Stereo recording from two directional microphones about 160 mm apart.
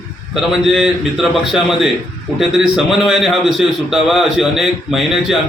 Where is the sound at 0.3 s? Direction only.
5° right (ahead or behind).